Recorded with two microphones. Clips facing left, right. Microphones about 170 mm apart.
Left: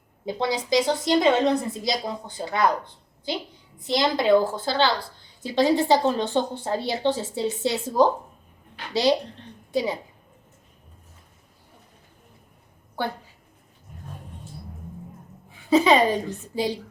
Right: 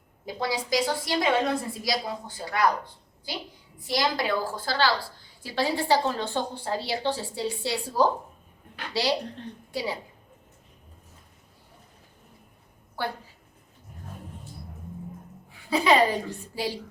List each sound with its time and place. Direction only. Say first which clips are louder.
0.3 s a woman's voice: left 4 dB; 20° left (ahead or behind)
3.8 s a woman's voice: left 6 dB; 20° left (ahead or behind)
15.7 s a woman's voice: left 4 dB; 20° left (ahead or behind)